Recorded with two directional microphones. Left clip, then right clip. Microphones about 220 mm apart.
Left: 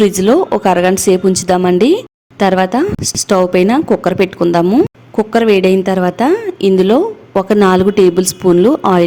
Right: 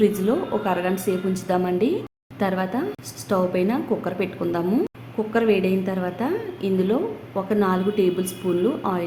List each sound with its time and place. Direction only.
0.0 s a woman's voice: 45° left (ahead or behind)